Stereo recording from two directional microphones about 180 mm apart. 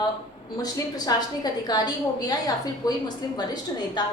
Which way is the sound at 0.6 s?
20° left (ahead or behind).